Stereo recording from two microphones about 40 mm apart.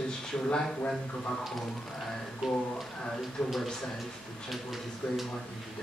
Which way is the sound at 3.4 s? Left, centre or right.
Left.